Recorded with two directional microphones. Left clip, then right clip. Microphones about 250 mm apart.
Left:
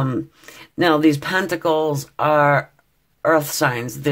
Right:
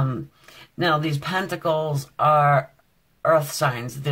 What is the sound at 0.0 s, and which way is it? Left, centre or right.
Speech, left.